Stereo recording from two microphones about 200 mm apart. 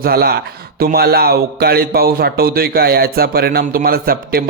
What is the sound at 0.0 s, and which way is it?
A man's voice, 50° right (ahead or behind).